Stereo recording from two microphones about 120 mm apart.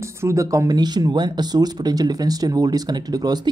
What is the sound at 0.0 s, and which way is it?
Speech, 25° right (ahead or behind).